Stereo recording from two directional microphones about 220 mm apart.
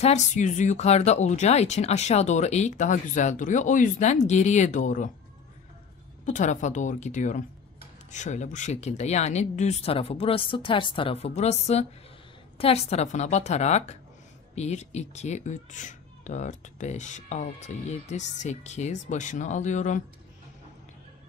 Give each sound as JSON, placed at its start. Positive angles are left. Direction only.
{"t": 0.0, "sound": "speech", "side_deg": 30}
{"t": 6.2, "sound": "speech", "side_deg": 35}